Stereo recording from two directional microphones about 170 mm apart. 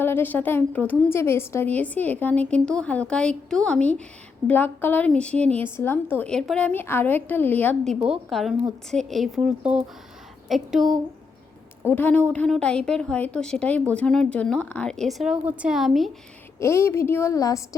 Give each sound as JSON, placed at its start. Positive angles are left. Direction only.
{"t": 0.0, "sound": "a woman's voice", "side_deg": 10}
{"t": 11.9, "sound": "a woman's voice", "side_deg": 10}
{"t": 16.6, "sound": "a woman's voice", "side_deg": 15}